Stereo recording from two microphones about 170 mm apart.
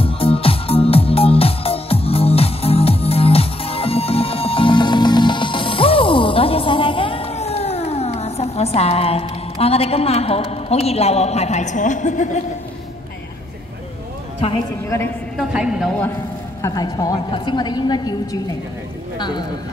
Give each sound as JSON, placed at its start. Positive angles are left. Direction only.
{"t": 0.0, "sound": "music", "side_deg": 35}
{"t": 15.3, "sound": "a woman's voice", "side_deg": -5}
{"t": 16.6, "sound": "a woman's voice", "side_deg": 25}